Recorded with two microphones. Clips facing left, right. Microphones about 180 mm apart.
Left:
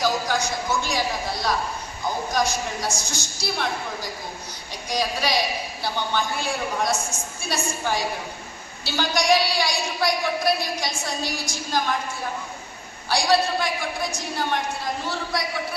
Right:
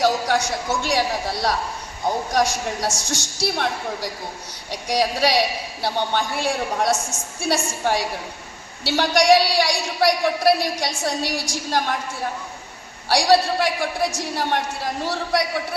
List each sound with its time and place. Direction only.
0.0 s a man's voice: 75° right (ahead or behind)
13.6 s a man's voice: 75° right (ahead or behind)